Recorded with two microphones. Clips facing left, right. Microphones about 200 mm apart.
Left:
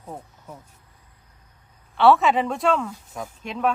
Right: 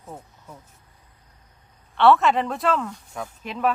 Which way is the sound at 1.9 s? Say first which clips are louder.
Even; centre (ahead or behind).